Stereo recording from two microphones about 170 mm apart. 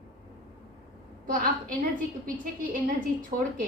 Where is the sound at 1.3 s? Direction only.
55° right (ahead or behind).